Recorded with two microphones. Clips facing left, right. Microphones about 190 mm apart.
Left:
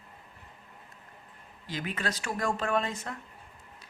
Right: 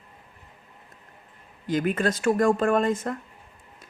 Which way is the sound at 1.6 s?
50° right (ahead or behind).